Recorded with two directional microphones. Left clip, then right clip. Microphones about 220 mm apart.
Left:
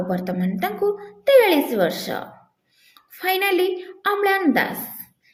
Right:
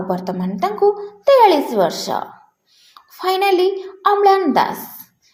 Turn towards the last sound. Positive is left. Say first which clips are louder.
# right 6 dB
turn(degrees=-15)  # may be behind; listen again after turning